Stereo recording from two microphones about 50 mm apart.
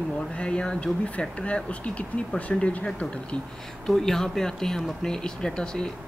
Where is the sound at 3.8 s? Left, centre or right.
Centre.